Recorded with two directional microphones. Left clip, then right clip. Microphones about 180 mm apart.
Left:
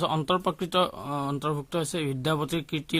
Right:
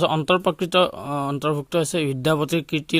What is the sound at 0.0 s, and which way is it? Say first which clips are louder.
Speech: right 6 dB; 30° right (ahead or behind).